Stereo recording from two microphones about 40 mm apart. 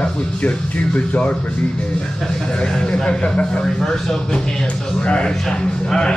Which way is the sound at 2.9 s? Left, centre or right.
Centre.